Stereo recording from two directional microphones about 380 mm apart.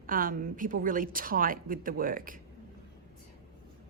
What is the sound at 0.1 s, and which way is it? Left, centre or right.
A woman's voice, right.